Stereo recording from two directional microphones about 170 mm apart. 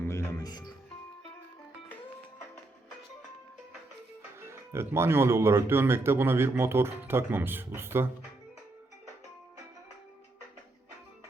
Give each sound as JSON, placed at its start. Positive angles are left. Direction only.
{"t": 0.0, "sound": "music", "side_deg": 15}
{"t": 4.4, "sound": "speech", "side_deg": -15}